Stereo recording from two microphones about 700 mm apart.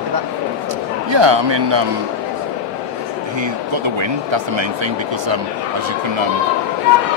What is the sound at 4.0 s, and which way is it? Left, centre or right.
Speech, right.